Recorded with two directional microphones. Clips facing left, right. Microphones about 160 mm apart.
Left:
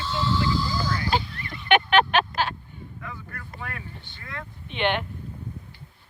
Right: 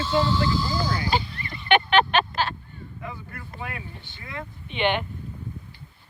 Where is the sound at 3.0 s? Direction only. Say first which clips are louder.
Right 3 dB; 20° right (ahead or behind).